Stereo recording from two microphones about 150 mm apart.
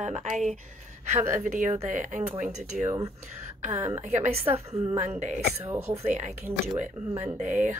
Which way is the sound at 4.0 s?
50° right (ahead or behind).